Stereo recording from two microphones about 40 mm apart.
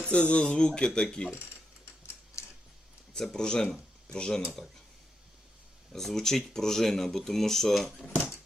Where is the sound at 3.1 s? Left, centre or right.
Centre.